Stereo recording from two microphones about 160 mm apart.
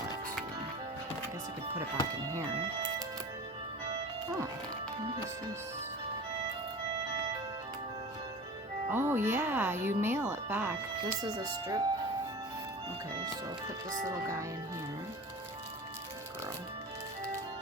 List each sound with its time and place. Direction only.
8.9 s speech: 15° right (ahead or behind)
11.2 s speech: 25° right (ahead or behind)
14.0 s speech: 20° right (ahead or behind)